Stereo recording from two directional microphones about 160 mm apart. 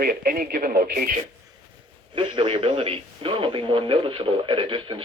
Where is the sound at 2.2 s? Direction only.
30° right (ahead or behind).